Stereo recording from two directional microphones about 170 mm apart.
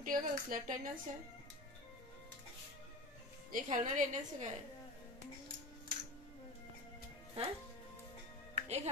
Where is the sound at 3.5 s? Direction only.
50° right (ahead or behind).